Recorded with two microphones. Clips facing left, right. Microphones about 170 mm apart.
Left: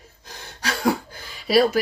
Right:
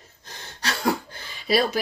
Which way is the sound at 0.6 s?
10° left (ahead or behind).